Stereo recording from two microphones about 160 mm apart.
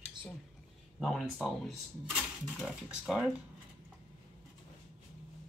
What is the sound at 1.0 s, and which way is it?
Speech, centre (ahead or behind).